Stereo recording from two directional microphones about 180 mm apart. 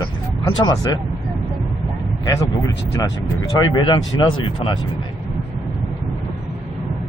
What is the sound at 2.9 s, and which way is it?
Speech, 20° left (ahead or behind).